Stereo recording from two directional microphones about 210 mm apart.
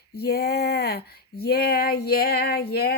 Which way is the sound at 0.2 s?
50° left (ahead or behind).